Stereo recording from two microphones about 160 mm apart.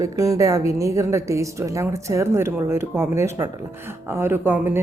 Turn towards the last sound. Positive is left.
turn(degrees=-15)  # may be behind; listen again after turning